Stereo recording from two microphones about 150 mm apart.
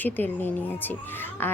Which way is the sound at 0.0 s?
10° left (ahead or behind).